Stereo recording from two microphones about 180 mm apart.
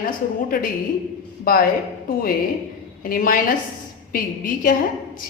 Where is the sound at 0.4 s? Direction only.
50° left (ahead or behind).